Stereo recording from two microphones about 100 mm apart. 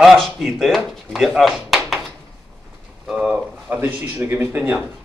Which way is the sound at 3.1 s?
15° right (ahead or behind).